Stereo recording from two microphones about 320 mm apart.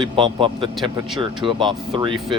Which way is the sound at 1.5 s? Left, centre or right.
Centre.